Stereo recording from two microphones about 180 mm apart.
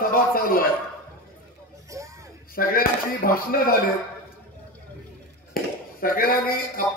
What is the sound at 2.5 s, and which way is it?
A man's voice, 55° left (ahead or behind).